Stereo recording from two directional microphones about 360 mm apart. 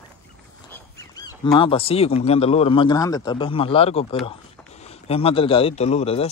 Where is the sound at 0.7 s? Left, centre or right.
Centre.